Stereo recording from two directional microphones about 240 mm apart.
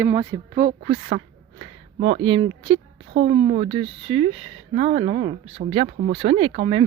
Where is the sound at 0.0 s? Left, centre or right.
Centre.